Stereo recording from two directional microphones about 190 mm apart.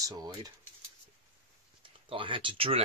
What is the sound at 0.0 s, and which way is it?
Speech, 20° right (ahead or behind).